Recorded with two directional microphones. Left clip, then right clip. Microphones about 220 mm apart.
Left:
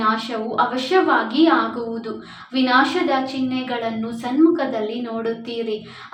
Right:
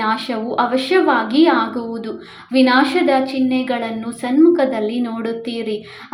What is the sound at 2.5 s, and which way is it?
A woman's voice, 30° right (ahead or behind).